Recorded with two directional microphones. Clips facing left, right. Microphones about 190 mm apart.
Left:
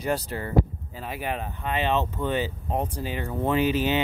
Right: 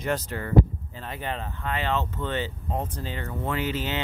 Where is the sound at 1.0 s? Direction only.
10° left (ahead or behind).